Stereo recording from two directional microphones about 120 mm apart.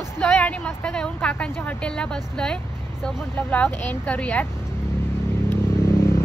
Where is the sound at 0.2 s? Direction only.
10° left (ahead or behind).